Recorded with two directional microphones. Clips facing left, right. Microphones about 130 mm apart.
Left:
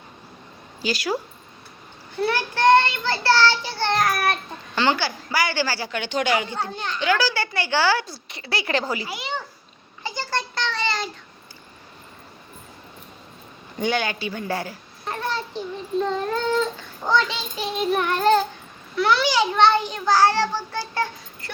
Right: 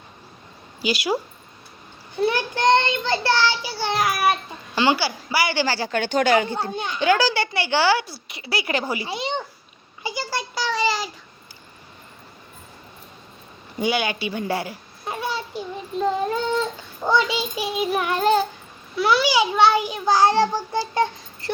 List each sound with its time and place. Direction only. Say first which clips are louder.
0.8 s child singing: right 2 dB; 15° right (ahead or behind)
2.2 s child singing: left 1 dB; 15° right (ahead or behind)
5.9 s speech: right 6 dB; 45° right (ahead or behind)
6.7 s child singing: right 2 dB; 15° right (ahead or behind)
7.0 s a woman's voice: right 3 dB; 25° right (ahead or behind)
9.0 s a woman's voice: right 3 dB; 25° right (ahead or behind)
10.0 s a sound: even; 10° right (ahead or behind)
13.7 s a sound: right 1 dB; 10° right (ahead or behind)
17.0 s child singing: right 2 dB; 10° right (ahead or behind)
18.9 s a child's voice: right 1 dB; 10° right (ahead or behind)